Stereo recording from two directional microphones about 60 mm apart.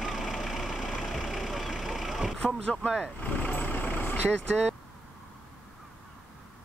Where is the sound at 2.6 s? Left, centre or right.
Centre.